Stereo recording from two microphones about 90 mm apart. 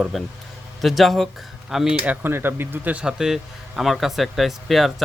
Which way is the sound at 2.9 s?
5° right (ahead or behind).